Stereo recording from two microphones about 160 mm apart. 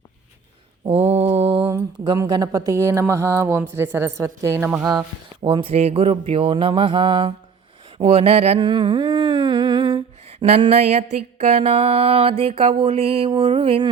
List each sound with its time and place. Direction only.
0.9 s mantra: 40° right (ahead or behind)
2.1 s speech: 25° right (ahead or behind)
4.9 s mantra: 30° right (ahead or behind)
7.9 s humming: 35° right (ahead or behind)
10.5 s mantra: 40° right (ahead or behind)